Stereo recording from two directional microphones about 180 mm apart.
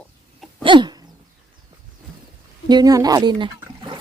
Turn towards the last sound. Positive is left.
turn(degrees=-25)  # may be behind; listen again after turning